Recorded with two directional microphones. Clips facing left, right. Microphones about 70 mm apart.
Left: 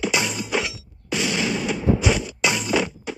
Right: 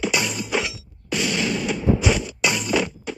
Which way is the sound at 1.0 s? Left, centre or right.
Left.